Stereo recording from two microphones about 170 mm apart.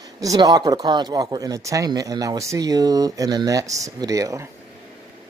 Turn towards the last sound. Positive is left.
turn(degrees=-20)  # may be behind; listen again after turning